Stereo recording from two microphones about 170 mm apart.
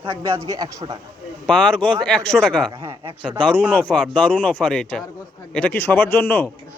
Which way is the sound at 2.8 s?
30° right (ahead or behind).